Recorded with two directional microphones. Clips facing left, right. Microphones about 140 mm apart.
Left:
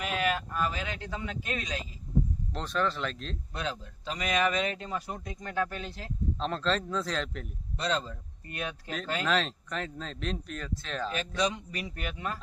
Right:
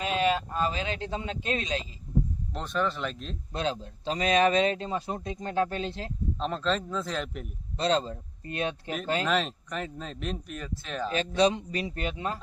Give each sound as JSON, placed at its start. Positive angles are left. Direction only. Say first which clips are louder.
{"t": 0.0, "sound": "speech", "louder": "right 4 dB", "side_deg": -25}
{"t": 2.5, "sound": "speech", "louder": "right 2 dB", "side_deg": -5}
{"t": 3.5, "sound": "speech", "louder": "right 6 dB", "side_deg": -25}
{"t": 6.4, "sound": "speech", "louder": "right 1 dB", "side_deg": -5}
{"t": 7.8, "sound": "speech", "louder": "right 5 dB", "side_deg": -30}
{"t": 9.2, "sound": "speech", "louder": "right 1 dB", "side_deg": -5}
{"t": 11.3, "sound": "speech", "louder": "right 7 dB", "side_deg": -30}